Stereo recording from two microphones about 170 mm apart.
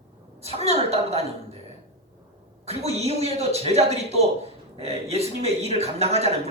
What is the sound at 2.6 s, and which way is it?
A woman's voice, 40° right (ahead or behind).